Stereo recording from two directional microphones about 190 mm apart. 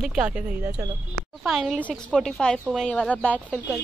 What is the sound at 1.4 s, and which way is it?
A woman's voice, centre (ahead or behind).